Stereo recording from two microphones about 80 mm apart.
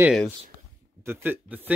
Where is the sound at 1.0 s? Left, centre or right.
Right.